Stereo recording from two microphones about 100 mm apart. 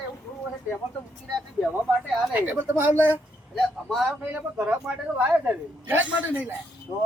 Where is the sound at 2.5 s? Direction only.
20° right (ahead or behind).